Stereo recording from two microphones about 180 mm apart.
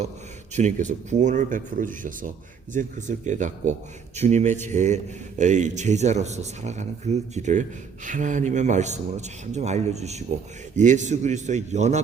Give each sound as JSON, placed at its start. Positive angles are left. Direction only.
{"t": 0.5, "sound": "speech", "side_deg": -45}